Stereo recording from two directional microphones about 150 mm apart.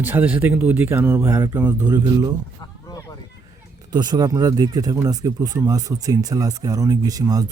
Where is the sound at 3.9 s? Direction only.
30° right (ahead or behind).